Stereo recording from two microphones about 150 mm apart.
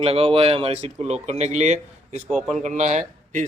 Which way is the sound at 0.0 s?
40° right (ahead or behind).